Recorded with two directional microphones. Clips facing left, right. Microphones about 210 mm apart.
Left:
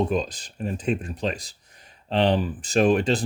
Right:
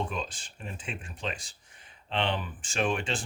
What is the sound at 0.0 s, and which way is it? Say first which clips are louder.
Speech: left 10 dB; 40° left (ahead or behind).